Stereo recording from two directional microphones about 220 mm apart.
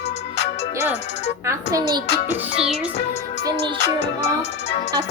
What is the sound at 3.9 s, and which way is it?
Music, 30° left (ahead or behind).